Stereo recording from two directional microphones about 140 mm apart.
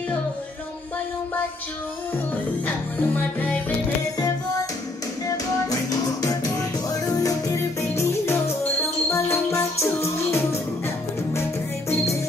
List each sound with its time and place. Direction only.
2.6 s music: 15° left (ahead or behind)
5.2 s music: 25° left (ahead or behind)